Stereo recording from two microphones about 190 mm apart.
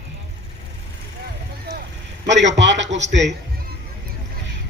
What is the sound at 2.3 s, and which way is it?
A man's voice, 70° right (ahead or behind).